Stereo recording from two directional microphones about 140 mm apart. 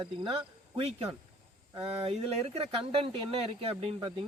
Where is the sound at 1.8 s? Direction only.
40° right (ahead or behind).